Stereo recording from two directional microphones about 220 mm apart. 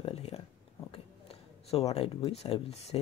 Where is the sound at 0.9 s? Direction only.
25° left (ahead or behind).